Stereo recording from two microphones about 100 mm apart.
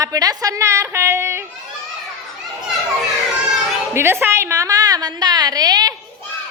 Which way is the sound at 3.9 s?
25° right (ahead or behind).